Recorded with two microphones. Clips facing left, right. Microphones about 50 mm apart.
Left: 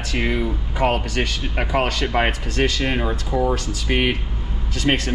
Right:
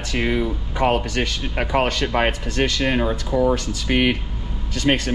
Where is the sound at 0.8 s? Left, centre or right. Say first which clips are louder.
Right 1 dB; left.